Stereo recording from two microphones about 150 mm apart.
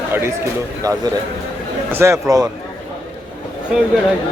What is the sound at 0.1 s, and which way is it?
A man's voice, 15° right (ahead or behind).